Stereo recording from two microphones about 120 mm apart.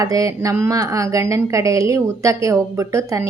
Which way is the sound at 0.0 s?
30° right (ahead or behind).